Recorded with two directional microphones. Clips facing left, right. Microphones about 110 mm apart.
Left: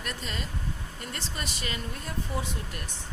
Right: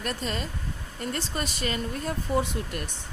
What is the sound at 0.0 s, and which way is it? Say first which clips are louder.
Speech: right 5 dB; 45° right (ahead or behind).